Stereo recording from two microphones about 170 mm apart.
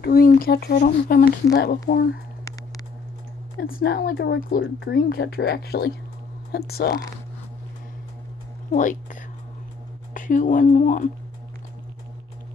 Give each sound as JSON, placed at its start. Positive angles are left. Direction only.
{"t": 0.0, "sound": "speech", "side_deg": 60}
{"t": 3.6, "sound": "speech", "side_deg": 60}
{"t": 10.1, "sound": "speech", "side_deg": 50}